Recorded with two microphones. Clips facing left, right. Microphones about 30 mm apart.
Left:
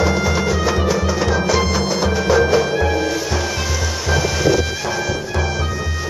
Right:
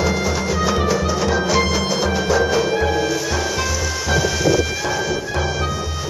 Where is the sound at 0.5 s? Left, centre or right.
Centre.